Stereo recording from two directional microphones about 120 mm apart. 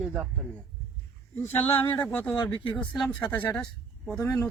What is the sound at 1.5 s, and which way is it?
Speech, 15° left (ahead or behind).